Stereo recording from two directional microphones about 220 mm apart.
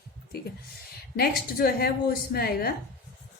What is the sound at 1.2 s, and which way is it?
A woman's voice, 45° left (ahead or behind).